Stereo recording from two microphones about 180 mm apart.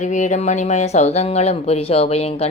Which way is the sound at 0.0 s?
45° left (ahead or behind).